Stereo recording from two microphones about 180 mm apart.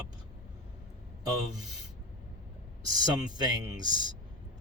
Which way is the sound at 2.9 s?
25° right (ahead or behind).